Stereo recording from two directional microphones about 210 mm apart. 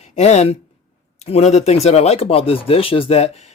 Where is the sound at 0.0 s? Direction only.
30° left (ahead or behind).